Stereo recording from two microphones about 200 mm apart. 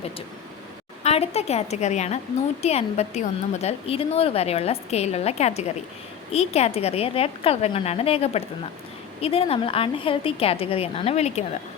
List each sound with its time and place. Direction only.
1.0 s a woman's voice: 30° left (ahead or behind)